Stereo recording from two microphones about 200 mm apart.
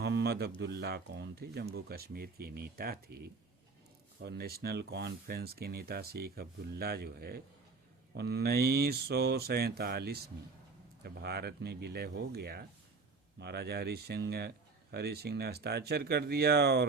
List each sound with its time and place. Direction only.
0.0 s speech: 55° right (ahead or behind)